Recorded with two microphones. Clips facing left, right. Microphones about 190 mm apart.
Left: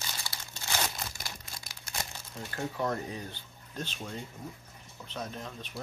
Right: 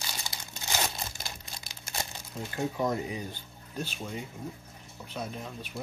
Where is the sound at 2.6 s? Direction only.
15° right (ahead or behind).